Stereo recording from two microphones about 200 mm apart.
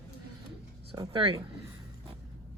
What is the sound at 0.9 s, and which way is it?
Speech, 20° right (ahead or behind).